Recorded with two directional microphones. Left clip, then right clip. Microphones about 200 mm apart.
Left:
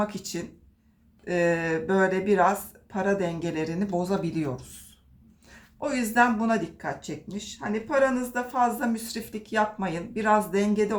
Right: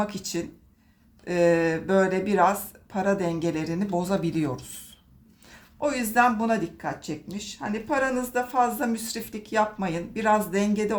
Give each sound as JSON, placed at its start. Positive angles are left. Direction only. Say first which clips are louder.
{"t": 0.0, "sound": "speech", "louder": "right 1 dB", "side_deg": -20}